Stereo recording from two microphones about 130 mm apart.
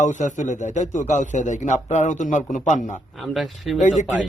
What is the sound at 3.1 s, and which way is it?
Speech, centre (ahead or behind).